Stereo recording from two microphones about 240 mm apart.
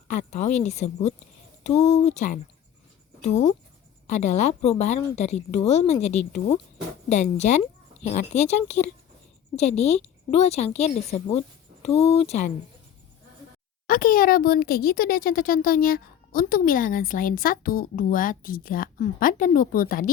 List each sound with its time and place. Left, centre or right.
0.1 s a woman's voice: left
4.0 s a woman's voice: left
13.8 s speech: left